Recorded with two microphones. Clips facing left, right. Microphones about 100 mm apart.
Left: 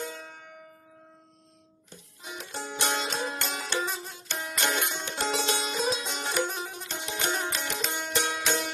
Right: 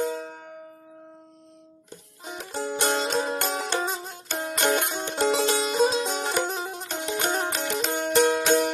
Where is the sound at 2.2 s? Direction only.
45° right (ahead or behind).